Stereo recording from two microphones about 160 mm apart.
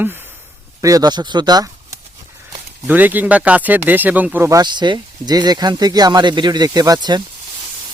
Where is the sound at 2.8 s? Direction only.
10° right (ahead or behind).